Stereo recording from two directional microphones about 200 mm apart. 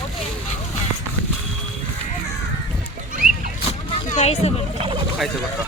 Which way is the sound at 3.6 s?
30° left (ahead or behind).